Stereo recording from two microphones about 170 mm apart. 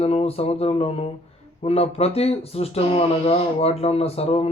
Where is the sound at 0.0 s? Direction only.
35° left (ahead or behind).